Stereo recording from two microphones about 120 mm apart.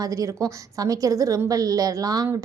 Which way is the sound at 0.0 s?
25° right (ahead or behind).